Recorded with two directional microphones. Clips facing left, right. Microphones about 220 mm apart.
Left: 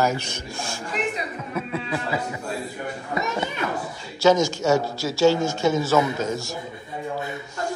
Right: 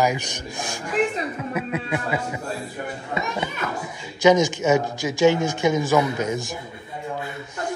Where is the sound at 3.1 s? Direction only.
15° right (ahead or behind).